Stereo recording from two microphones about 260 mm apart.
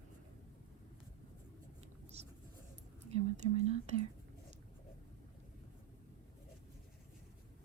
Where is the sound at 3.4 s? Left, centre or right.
Right.